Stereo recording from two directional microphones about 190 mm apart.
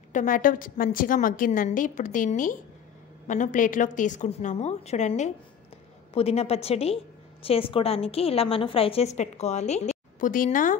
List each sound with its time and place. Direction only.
0.1 s a woman's voice: 45° left (ahead or behind)